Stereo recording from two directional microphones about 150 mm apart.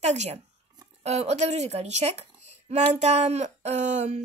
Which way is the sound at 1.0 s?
45° right (ahead or behind).